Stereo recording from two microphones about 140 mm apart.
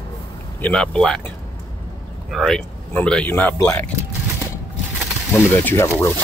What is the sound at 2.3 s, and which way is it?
Speech, centre (ahead or behind).